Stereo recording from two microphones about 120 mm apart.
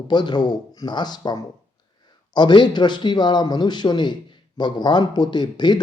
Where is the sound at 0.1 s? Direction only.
40° left (ahead or behind).